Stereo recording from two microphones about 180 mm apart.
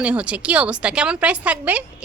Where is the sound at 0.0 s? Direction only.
5° right (ahead or behind).